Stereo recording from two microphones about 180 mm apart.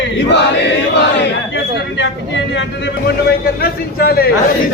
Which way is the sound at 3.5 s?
55° left (ahead or behind).